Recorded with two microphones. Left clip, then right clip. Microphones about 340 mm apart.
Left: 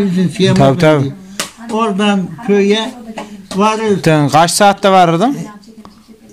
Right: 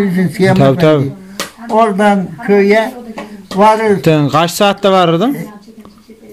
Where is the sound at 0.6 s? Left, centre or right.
Centre.